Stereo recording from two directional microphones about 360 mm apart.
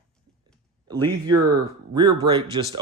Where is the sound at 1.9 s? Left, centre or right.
Centre.